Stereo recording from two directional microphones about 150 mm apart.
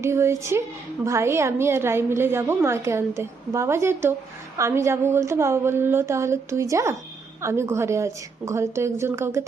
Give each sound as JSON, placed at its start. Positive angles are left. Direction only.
{"t": 0.0, "sound": "a woman's voice", "side_deg": -20}